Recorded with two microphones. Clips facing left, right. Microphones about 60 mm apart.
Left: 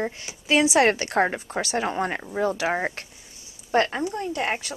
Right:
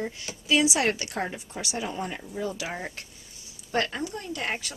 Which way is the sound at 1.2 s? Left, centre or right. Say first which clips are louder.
Left 8 dB; left.